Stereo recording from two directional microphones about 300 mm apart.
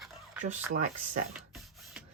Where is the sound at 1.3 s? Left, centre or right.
Centre.